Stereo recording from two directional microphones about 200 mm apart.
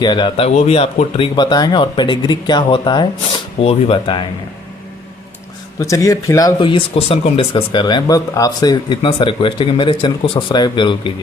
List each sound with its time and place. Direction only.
0.0 s speech: 20° left (ahead or behind)
5.8 s speech: 15° left (ahead or behind)